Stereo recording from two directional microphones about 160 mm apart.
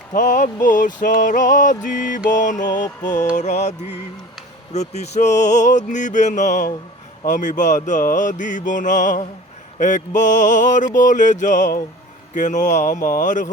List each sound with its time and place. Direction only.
0.1 s mantra: 55° left (ahead or behind)
2.6 s mantra: 25° left (ahead or behind)
3.3 s mantra: 45° left (ahead or behind)